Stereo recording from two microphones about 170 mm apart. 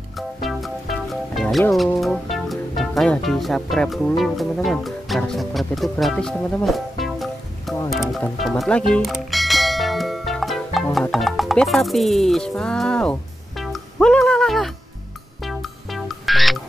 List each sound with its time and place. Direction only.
0.4 s music: centre (ahead or behind)
2.0 s speech: centre (ahead or behind)
7.9 s music: centre (ahead or behind)